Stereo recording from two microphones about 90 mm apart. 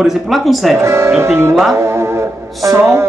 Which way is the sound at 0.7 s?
30° right (ahead or behind).